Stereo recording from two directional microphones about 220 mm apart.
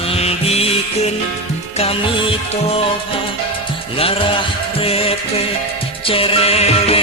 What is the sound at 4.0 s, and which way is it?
Music, 25° left (ahead or behind).